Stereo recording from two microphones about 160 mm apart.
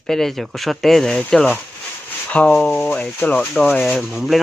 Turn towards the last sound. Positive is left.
turn(degrees=0)  # may be behind; listen again after turning